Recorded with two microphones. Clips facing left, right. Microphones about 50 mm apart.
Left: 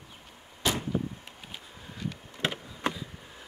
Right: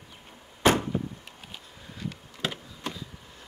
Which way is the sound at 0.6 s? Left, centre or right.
Right.